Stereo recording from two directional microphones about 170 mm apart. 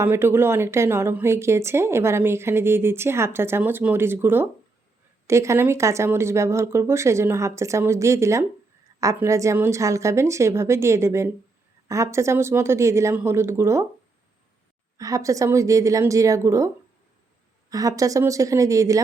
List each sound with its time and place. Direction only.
0.0 s a woman's voice: 15° right (ahead or behind)
14.9 s a woman's voice: 20° right (ahead or behind)